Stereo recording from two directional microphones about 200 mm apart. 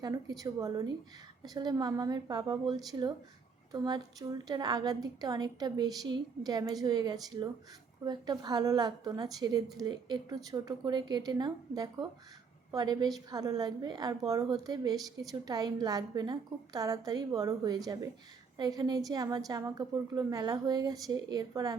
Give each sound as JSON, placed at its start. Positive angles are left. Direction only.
{"t": 0.0, "sound": "a woman's voice", "side_deg": -20}